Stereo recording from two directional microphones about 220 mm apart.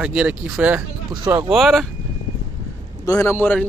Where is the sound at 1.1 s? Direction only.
20° right (ahead or behind).